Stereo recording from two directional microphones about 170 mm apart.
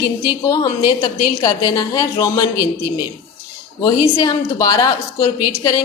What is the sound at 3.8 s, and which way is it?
A woman's voice, 20° left (ahead or behind).